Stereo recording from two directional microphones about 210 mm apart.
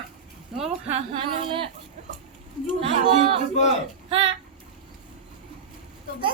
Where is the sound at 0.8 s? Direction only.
25° right (ahead or behind).